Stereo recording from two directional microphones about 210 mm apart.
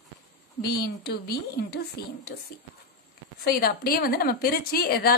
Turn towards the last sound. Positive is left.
turn(degrees=45)  # may be behind; listen again after turning